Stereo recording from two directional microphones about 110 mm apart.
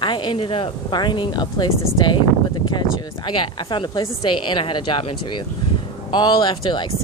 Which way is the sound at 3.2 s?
45° left (ahead or behind).